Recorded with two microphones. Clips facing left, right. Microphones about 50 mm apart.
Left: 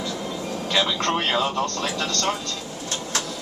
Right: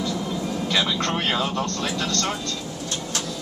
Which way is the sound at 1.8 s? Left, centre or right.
Left.